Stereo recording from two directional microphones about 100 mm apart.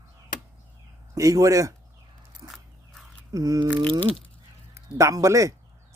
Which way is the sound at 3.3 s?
40° right (ahead or behind).